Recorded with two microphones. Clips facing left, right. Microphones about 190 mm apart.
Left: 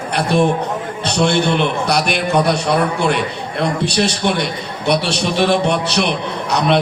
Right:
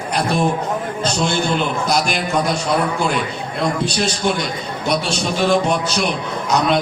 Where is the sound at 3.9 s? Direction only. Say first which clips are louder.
Left 2 dB; 65° left (ahead or behind).